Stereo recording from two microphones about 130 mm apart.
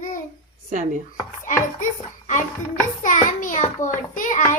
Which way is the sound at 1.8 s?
80° left.